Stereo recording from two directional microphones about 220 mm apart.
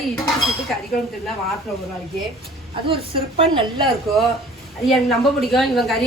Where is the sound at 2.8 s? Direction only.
25° right (ahead or behind).